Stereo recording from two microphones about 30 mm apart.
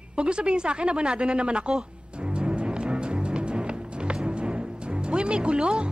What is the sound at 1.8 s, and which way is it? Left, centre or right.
Timpani, right.